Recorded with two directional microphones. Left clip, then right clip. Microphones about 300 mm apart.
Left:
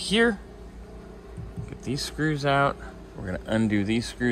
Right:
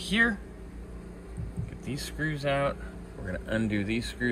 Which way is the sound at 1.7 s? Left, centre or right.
Left.